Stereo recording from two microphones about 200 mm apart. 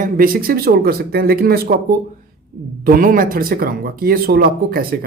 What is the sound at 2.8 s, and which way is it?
Speech, 45° right (ahead or behind).